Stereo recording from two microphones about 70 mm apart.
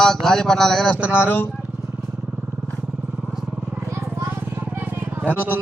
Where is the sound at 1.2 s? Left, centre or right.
Left.